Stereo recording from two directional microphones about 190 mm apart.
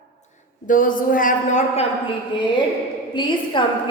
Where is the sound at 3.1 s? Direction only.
25° left (ahead or behind).